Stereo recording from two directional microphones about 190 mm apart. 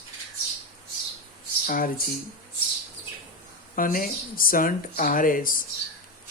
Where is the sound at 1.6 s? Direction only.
45° left (ahead or behind).